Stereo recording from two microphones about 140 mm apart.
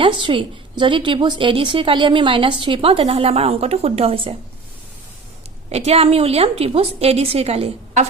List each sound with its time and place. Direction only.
0.0 s a woman's voice: 35° right (ahead or behind)
5.6 s a woman's voice: 50° right (ahead or behind)